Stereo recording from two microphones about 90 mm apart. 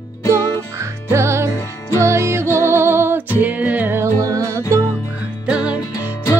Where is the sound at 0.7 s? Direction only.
30° right (ahead or behind).